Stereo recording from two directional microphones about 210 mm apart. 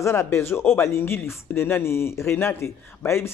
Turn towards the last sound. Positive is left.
turn(degrees=10)  # may be behind; listen again after turning